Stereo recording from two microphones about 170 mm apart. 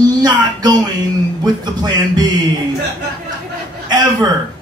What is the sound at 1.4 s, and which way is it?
Speech, 25° right (ahead or behind).